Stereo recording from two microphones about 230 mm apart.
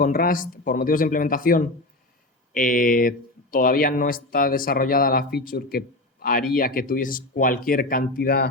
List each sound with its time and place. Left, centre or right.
0.0 s speech: left